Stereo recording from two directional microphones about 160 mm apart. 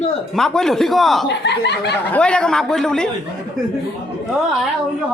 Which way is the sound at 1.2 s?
90° left.